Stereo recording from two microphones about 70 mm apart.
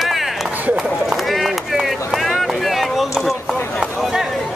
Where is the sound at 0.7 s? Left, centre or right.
Centre.